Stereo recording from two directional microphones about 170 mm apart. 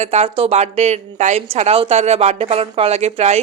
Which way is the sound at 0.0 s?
40° right (ahead or behind).